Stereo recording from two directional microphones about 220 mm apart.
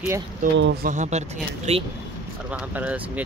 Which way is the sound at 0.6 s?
45° right (ahead or behind).